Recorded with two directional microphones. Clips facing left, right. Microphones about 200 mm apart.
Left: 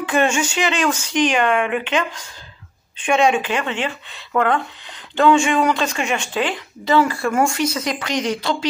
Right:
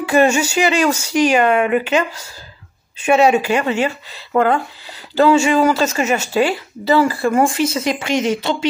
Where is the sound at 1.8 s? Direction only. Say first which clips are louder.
Right 4 dB; 10° right (ahead or behind).